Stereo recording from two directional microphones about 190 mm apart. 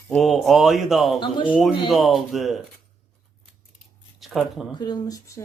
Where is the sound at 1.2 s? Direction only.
25° left (ahead or behind).